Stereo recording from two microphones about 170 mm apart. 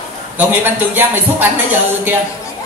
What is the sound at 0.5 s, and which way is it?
Speech, 10° right (ahead or behind).